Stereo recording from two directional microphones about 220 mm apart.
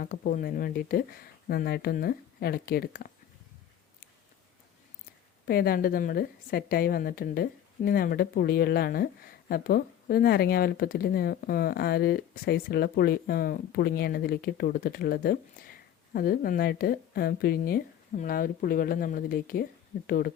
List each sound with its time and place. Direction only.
0.0 s speech: 40° left (ahead or behind)
5.5 s speech: 45° left (ahead or behind)